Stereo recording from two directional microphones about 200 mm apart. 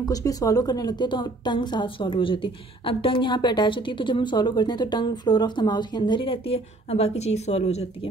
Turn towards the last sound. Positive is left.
turn(degrees=30)  # may be behind; listen again after turning